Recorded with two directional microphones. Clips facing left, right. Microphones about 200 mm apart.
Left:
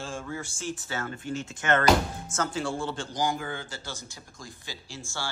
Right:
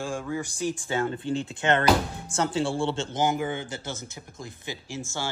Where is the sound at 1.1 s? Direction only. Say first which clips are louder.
Right 5 dB; 30° right (ahead or behind).